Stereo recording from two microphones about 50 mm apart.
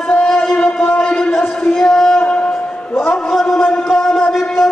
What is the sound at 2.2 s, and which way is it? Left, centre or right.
Music, centre.